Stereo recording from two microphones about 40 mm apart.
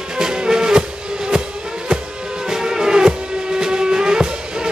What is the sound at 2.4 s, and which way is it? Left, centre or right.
Music, centre.